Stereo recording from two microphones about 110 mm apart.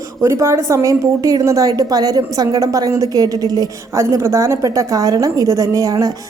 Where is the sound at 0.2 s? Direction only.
25° right (ahead or behind).